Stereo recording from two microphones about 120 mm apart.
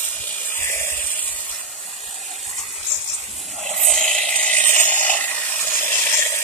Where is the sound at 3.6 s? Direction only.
65° right (ahead or behind).